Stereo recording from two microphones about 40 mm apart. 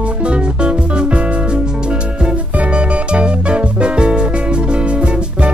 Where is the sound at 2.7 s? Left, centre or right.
Right.